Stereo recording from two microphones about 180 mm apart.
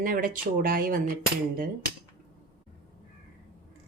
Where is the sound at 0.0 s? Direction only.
50° right (ahead or behind).